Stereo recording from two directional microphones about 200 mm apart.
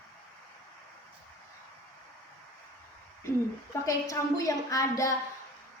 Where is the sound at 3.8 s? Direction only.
15° left (ahead or behind).